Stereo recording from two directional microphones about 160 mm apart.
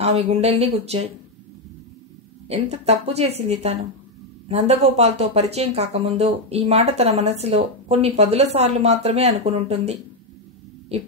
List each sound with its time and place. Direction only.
0.0 s speech: 40° right (ahead or behind)
2.4 s speech: 40° right (ahead or behind)